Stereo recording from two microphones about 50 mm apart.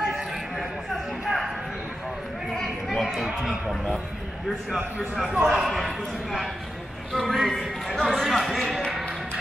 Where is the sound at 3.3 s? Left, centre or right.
Centre.